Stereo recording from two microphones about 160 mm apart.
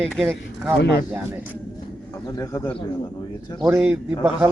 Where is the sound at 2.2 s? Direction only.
20° left (ahead or behind).